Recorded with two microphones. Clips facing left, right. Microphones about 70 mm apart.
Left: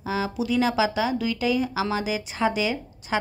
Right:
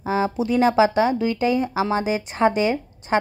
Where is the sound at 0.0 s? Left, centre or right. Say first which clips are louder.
Right 5 dB; right.